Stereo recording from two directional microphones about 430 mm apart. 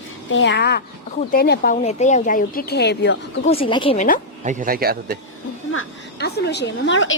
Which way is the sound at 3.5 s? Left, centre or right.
Centre.